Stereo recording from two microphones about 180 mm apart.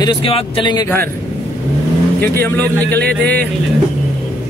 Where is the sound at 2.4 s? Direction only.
10° left (ahead or behind).